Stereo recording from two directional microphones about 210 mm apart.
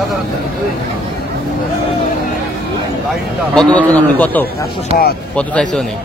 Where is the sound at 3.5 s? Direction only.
5° left (ahead or behind).